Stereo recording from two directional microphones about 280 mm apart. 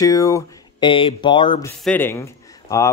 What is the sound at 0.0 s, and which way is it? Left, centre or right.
Speech, centre.